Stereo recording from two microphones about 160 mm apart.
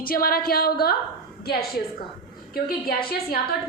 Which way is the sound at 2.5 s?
70° left (ahead or behind).